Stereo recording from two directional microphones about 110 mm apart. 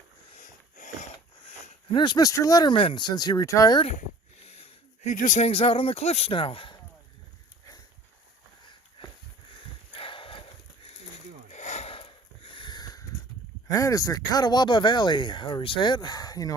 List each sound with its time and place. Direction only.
1.9 s speech: 45° left (ahead or behind)
2.7 s speech: 50° left (ahead or behind)
5.4 s speech: 60° left (ahead or behind)
6.3 s speech: 50° left (ahead or behind)
9.0 s a sound: 55° left (ahead or behind)
9.9 s horse: 55° left (ahead or behind)
11.5 s sniff: 90° left; by 13.1 s 35° left (ahead or behind)
13.7 s speech: 30° left (ahead or behind)